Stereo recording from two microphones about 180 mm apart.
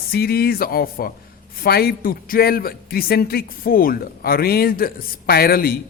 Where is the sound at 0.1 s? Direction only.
60° left (ahead or behind).